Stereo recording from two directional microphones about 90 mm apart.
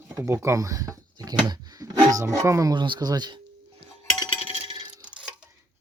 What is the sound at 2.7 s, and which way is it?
Speech, 60° right (ahead or behind).